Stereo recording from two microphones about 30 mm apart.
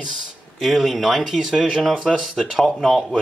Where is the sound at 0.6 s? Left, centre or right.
Centre.